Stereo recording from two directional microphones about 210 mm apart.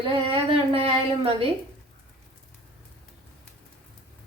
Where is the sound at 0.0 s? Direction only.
25° right (ahead or behind).